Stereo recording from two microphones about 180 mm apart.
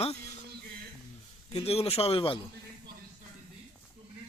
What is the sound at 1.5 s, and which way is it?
Speech, 35° left (ahead or behind).